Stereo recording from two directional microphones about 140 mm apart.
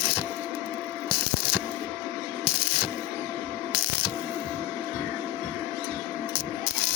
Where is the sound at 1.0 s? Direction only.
40° right (ahead or behind).